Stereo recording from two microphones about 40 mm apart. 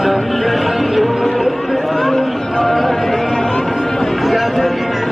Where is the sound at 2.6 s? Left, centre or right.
Centre.